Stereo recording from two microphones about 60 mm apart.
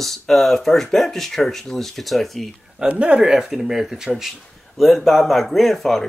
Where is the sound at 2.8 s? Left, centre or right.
Right.